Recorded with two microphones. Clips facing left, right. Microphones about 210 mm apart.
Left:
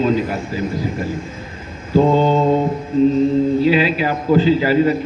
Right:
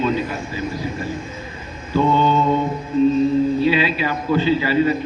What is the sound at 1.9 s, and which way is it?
Speech, 35° left (ahead or behind).